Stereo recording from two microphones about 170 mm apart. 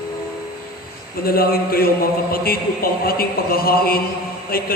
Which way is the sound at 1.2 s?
60° left (ahead or behind).